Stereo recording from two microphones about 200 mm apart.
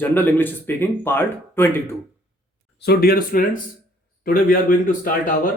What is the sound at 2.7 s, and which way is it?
Speech, 50° left (ahead or behind).